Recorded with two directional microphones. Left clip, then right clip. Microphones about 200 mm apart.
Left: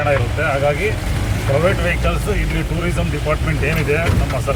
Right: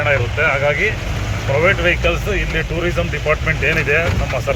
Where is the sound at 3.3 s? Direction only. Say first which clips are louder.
Right 4 dB; 5° right (ahead or behind).